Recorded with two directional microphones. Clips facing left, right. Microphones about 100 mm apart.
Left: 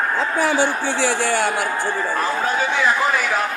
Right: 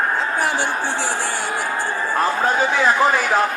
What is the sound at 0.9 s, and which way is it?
Speech, 90° left.